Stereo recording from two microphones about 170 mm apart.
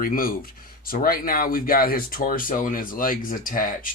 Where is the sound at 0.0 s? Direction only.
55° left (ahead or behind).